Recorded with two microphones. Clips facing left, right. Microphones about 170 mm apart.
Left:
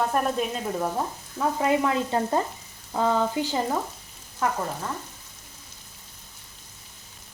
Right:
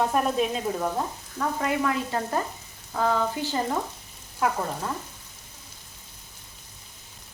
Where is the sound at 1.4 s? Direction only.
20° left (ahead or behind).